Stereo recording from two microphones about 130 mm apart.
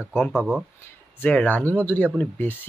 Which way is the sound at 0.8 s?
10° left (ahead or behind).